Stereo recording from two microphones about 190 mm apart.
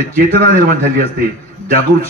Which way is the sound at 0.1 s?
50° right (ahead or behind).